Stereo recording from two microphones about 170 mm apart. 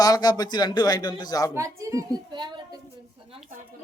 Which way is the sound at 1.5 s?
20° right (ahead or behind).